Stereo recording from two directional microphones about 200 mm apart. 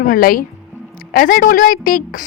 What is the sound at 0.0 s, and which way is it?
Speech, 45° left (ahead or behind).